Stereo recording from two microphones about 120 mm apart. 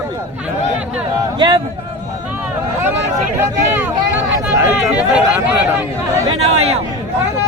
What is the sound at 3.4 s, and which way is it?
Speech, 15° right (ahead or behind).